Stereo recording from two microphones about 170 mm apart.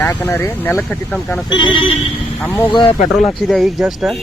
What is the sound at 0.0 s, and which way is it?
Speech, 10° left (ahead or behind).